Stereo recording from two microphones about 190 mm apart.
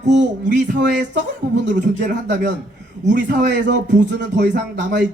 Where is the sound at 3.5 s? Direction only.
70° right (ahead or behind).